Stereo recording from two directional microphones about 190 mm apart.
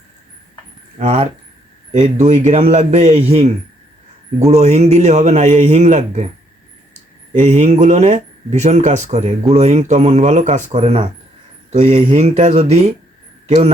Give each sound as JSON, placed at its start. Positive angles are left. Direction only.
{"t": 0.9, "sound": "speech", "side_deg": -35}
{"t": 7.3, "sound": "speech", "side_deg": -40}